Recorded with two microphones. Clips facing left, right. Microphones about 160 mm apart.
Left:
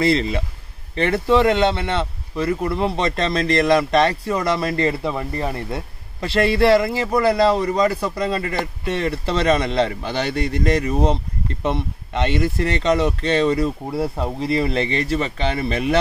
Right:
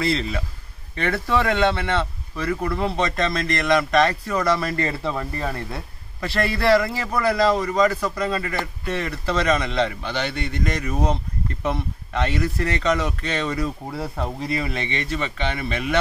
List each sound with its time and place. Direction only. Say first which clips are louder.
0.9 s speech: left 5 dB; 20° left (ahead or behind)
7.1 s a man's voice: left 3 dB; 35° left (ahead or behind)
14.6 s a man's voice: left 6 dB; 35° left (ahead or behind)